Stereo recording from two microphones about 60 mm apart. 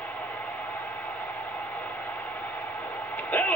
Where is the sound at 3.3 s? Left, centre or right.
Left.